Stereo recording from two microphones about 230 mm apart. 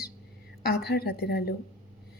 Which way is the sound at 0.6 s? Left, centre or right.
Left.